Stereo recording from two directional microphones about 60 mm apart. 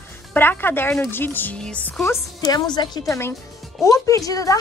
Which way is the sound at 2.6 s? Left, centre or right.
Left.